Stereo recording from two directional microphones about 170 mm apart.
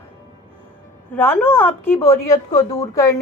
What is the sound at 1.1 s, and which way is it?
Speech, 10° left (ahead or behind).